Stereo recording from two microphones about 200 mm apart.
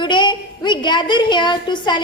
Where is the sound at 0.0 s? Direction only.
20° left (ahead or behind).